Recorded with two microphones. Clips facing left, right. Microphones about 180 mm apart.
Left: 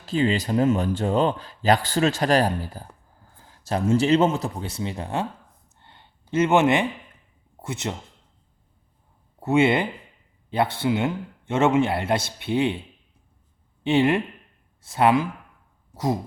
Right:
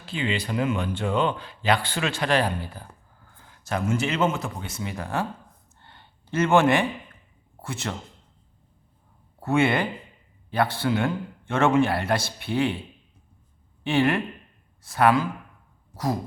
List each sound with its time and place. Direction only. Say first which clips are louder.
0.0 s a man's voice: left 6 dB; 40° left (ahead or behind); by 5.2 s 25° left (ahead or behind)
5.8 s a sound: even; 20° left (ahead or behind)
7.6 s a man's voice: left 2 dB; 20° left (ahead or behind)
9.4 s a man's voice: left 3 dB; 20° left (ahead or behind)
13.8 s a man's voice: left 2 dB; 25° left (ahead or behind)